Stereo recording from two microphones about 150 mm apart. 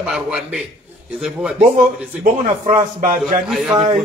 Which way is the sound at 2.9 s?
65° right (ahead or behind).